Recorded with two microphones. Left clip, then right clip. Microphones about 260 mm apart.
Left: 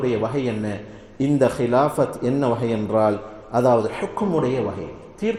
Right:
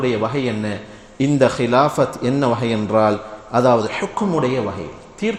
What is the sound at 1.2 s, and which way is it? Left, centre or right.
Speech, right.